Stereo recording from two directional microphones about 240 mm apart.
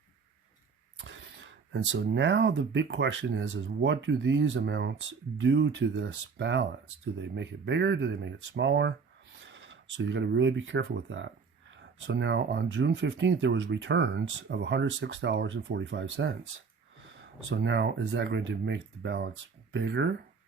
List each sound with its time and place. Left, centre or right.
0.9 s speech: right